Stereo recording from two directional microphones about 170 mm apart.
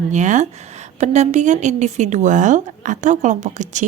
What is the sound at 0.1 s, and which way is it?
A woman's voice, 45° right (ahead or behind).